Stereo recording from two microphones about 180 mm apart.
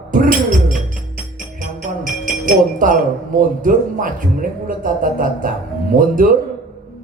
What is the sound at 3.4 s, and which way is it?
A man's voice, 50° right (ahead or behind).